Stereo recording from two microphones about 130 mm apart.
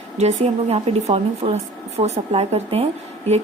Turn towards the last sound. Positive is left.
turn(degrees=-55)  # may be behind; listen again after turning